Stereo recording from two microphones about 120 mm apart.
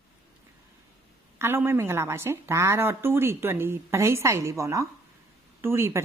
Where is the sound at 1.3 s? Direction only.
20° right (ahead or behind).